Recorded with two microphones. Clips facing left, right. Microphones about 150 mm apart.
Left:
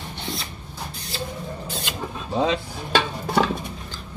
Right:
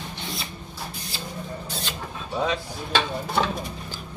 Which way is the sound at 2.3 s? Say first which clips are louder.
Left 4 dB; 25° left (ahead or behind).